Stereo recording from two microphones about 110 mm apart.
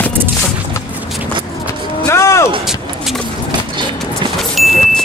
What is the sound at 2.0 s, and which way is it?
Music, 25° left (ahead or behind).